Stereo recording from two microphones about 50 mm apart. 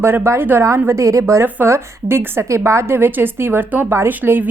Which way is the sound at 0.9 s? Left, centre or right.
Right.